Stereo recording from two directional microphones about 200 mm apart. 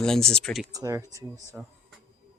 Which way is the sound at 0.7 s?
15° right (ahead or behind).